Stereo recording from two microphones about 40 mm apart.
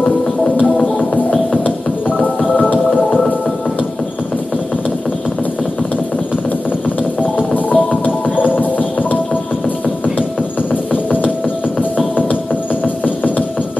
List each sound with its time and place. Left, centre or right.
1.6 s music: left
7.2 s music: left
10.7 s music: left
12.8 s a sound: left